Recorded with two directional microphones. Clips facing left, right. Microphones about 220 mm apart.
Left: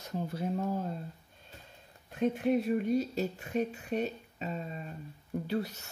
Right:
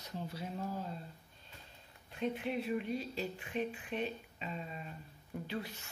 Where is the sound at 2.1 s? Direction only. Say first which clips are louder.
Left 8 dB; 45° left (ahead or behind).